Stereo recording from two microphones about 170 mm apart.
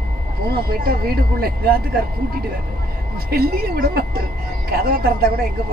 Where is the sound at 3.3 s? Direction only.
65° right (ahead or behind).